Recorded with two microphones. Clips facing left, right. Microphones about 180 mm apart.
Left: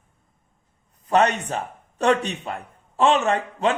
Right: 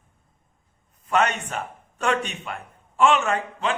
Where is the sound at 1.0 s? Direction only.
35° left (ahead or behind).